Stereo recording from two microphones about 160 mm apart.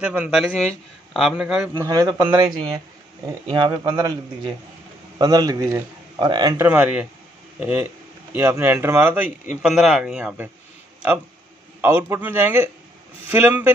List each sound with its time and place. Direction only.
0.0 s a man's voice: 10° right (ahead or behind)
1.7 s a man's voice: 25° right (ahead or behind)
3.4 s a man's voice: 30° right (ahead or behind)
6.5 s speech: 15° right (ahead or behind)
11.8 s speech: 15° right (ahead or behind)